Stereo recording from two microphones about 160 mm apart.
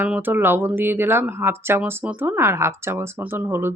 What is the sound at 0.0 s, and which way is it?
Speech, 10° right (ahead or behind).